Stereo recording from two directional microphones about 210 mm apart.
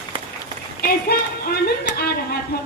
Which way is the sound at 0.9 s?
45° left (ahead or behind).